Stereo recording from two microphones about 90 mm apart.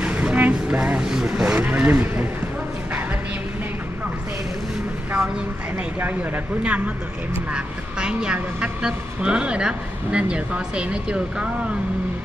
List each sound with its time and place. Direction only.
0.0 s speech: 15° right (ahead or behind)
5.9 s a woman's voice: 20° right (ahead or behind)